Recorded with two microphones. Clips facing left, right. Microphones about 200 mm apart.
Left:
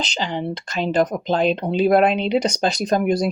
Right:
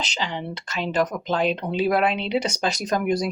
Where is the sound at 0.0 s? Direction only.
35° left (ahead or behind).